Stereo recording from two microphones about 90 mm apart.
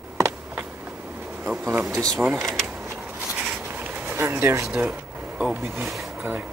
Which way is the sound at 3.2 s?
15° right (ahead or behind).